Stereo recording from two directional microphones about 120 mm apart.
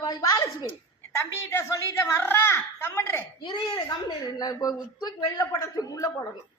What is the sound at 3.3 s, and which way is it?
Speech, 40° left (ahead or behind).